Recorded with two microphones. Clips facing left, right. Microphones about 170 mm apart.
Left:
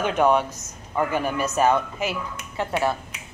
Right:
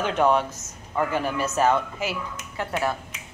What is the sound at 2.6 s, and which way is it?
Speech, 25° left (ahead or behind).